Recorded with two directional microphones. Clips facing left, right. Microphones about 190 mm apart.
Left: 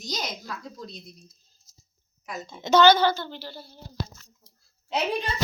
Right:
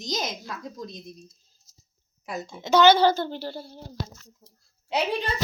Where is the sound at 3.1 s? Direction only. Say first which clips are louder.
Right 6 dB; 50° right (ahead or behind).